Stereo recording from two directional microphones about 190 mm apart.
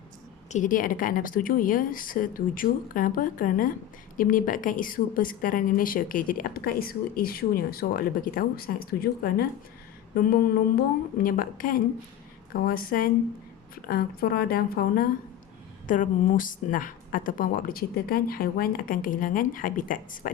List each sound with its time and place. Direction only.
0.5 s speech: 45° left (ahead or behind)